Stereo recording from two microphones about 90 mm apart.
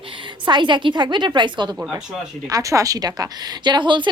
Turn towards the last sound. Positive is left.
turn(degrees=-60)  # may be behind; listen again after turning